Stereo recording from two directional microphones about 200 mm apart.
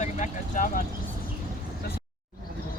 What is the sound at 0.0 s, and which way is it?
Vehicle, 40° left (ahead or behind).